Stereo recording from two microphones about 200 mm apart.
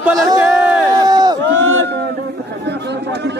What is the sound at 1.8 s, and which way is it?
Speech, 55° right (ahead or behind).